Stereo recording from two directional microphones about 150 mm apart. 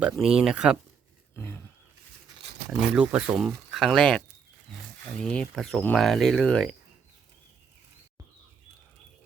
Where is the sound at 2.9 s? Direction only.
10° right (ahead or behind).